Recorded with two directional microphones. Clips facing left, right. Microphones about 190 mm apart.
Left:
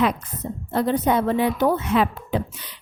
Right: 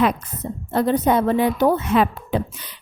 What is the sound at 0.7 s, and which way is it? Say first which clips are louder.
Speech: right 2 dB; 45° right (ahead or behind).